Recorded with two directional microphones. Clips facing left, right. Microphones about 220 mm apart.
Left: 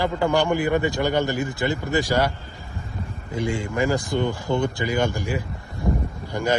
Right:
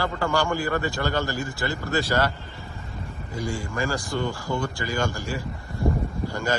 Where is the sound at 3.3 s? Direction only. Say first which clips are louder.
Left 5 dB; 25° left (ahead or behind).